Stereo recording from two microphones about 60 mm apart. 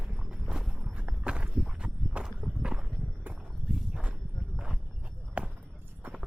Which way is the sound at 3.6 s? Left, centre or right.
Centre.